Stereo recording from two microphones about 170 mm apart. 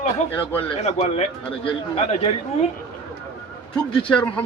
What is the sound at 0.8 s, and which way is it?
Speech, 40° left (ahead or behind).